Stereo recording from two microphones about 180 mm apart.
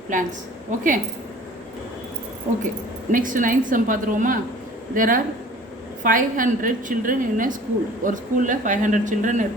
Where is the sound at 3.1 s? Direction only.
45° right (ahead or behind).